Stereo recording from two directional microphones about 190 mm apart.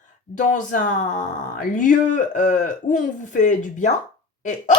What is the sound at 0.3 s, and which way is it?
Speech, 40° left (ahead or behind).